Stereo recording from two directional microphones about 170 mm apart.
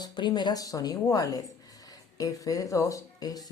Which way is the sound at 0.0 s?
25° left (ahead or behind).